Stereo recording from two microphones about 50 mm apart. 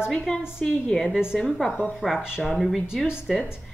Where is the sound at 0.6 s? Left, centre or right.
Centre.